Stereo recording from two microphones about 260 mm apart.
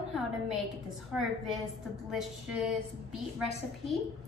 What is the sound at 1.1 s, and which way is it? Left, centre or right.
Speech, centre.